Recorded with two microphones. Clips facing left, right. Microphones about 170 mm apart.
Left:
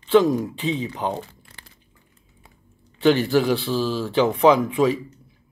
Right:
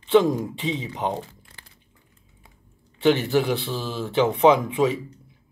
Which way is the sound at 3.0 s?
20° right (ahead or behind).